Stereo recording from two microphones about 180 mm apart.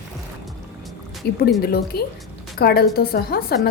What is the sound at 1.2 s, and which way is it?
A woman's voice, 65° left (ahead or behind).